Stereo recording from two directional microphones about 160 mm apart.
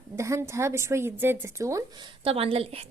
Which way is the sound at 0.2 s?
20° right (ahead or behind).